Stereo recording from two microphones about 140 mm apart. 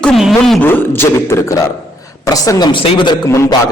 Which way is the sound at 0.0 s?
Centre (ahead or behind).